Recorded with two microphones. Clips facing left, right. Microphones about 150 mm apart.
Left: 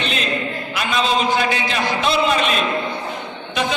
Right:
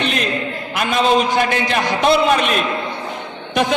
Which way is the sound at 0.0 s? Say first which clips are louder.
Right 4 dB; 55° right (ahead or behind).